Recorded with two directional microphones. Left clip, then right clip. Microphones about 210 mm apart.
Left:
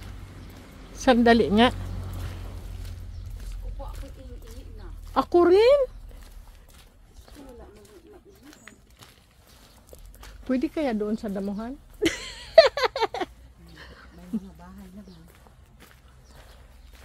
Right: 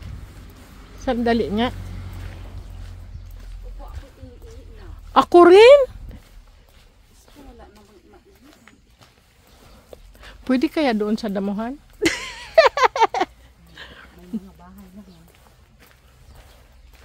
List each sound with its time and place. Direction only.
1.0 s speech: 15° left (ahead or behind)
5.1 s speech: 35° right (ahead or behind)
10.4 s speech: 35° right (ahead or behind)
12.0 s a sound: 25° right (ahead or behind)
13.7 s dog: 20° right (ahead or behind)